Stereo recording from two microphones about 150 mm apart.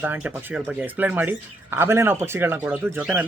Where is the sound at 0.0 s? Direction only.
10° right (ahead or behind).